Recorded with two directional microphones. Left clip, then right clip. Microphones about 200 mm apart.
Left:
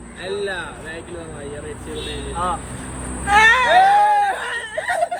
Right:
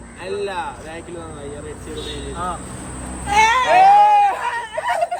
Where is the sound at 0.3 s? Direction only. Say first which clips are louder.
Right 2 dB; 50° right (ahead or behind).